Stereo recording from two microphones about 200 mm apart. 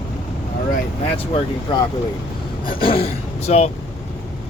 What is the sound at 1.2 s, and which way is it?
Speech, 30° left (ahead or behind).